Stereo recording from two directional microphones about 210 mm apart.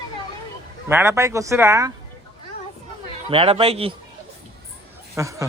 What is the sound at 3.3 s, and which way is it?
Speech, 25° right (ahead or behind).